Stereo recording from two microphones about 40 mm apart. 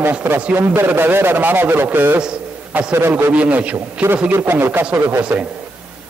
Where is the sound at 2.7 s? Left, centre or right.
Right.